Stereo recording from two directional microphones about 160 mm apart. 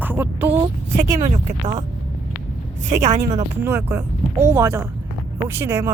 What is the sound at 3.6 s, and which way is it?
Speech, 15° right (ahead or behind).